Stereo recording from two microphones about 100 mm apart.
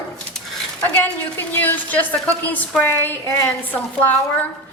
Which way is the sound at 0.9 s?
15° left (ahead or behind).